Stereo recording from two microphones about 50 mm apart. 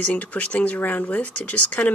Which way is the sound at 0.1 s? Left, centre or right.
Left.